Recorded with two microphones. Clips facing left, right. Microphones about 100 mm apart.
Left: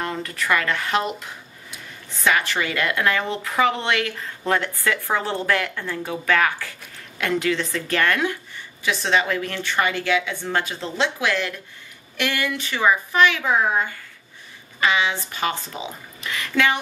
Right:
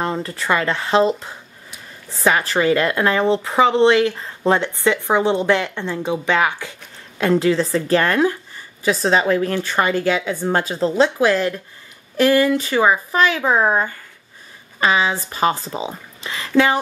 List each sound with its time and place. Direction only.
0.0 s speech: 30° right (ahead or behind)
7.2 s a woman's voice: 30° right (ahead or behind)